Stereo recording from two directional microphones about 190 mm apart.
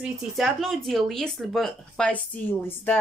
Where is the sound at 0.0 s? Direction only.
Centre (ahead or behind).